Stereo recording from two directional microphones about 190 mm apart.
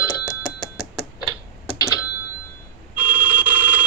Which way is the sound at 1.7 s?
20° left (ahead or behind).